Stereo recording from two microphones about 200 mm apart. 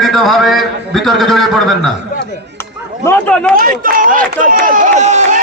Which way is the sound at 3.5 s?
45° right (ahead or behind).